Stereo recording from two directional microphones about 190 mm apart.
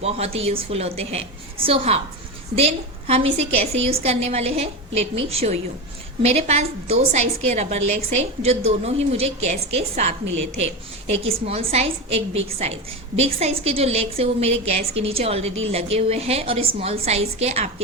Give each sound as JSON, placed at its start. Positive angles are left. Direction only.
{"t": 0.0, "sound": "a woman's voice", "side_deg": -35}